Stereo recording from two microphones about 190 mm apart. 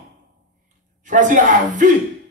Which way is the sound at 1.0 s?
40° right (ahead or behind).